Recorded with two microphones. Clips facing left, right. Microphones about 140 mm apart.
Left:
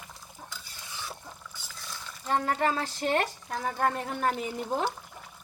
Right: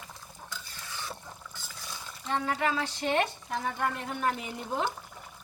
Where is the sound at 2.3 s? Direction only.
40° left (ahead or behind).